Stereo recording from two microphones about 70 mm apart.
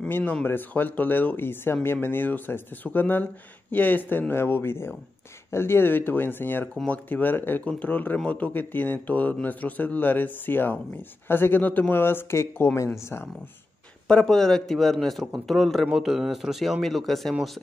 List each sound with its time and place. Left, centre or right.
0.1 s speech: left
14.0 s speech: centre